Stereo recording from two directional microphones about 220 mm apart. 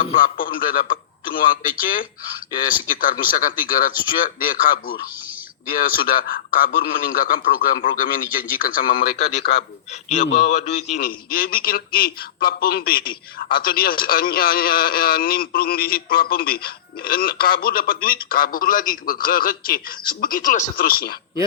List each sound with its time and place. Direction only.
0.0 s a man's voice: 40° left (ahead or behind)
9.9 s a man's voice: 30° left (ahead or behind)